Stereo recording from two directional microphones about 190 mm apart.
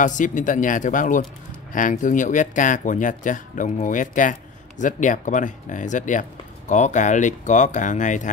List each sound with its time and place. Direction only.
0.0 s speech: 45° left (ahead or behind)